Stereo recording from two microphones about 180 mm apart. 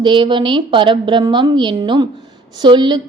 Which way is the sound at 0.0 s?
25° right (ahead or behind).